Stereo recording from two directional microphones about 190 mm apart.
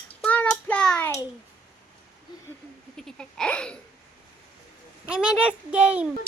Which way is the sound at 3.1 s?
5° left (ahead or behind).